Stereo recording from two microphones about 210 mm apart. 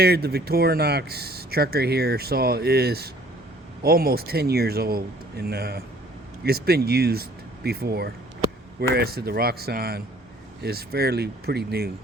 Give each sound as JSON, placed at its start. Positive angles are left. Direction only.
{"t": 0.0, "sound": "speech", "side_deg": -50}